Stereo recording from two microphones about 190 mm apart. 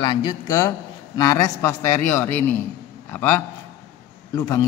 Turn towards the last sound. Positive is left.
turn(degrees=15)  # may be behind; listen again after turning